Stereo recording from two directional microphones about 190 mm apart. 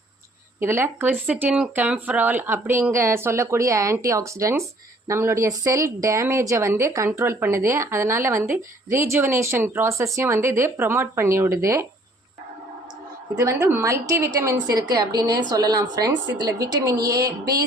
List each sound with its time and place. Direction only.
0.6 s a woman's voice: 10° right (ahead or behind)
13.3 s a woman's voice: 15° right (ahead or behind)